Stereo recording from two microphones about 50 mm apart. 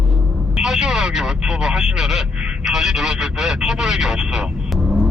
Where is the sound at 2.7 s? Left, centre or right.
Centre.